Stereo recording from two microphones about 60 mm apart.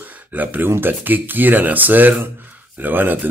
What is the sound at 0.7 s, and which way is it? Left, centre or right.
Speech, right.